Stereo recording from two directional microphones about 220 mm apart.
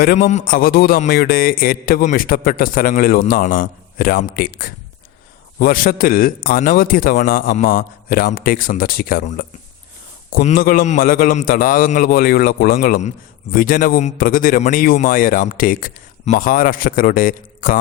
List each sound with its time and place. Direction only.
0.0 s a man's voice: 40° left (ahead or behind)